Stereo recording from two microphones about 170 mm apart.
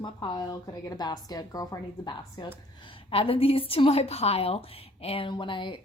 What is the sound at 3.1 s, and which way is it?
A woman's voice, 35° left (ahead or behind).